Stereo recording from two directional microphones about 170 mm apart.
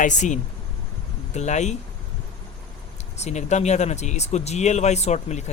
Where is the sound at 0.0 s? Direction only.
45° left (ahead or behind).